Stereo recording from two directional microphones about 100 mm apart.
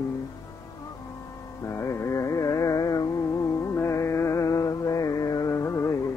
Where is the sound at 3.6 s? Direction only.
30° left (ahead or behind).